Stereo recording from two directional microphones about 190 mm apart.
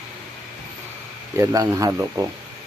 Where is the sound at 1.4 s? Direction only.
15° right (ahead or behind).